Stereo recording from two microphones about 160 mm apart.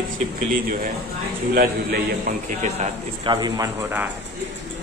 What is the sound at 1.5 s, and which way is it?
Speech, 65° right (ahead or behind).